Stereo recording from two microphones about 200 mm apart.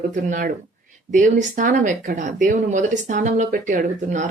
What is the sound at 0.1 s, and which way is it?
Speech, 40° right (ahead or behind).